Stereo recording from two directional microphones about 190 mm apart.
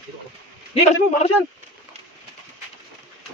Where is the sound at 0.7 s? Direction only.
35° left (ahead or behind).